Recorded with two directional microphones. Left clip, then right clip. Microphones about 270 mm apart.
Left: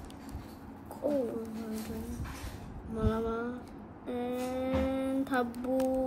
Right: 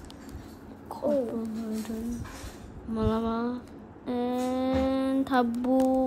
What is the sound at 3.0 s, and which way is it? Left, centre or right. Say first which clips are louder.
Speech: right 4 dB; right.